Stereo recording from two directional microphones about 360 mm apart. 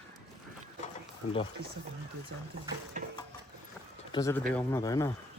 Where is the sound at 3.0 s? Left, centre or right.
Right.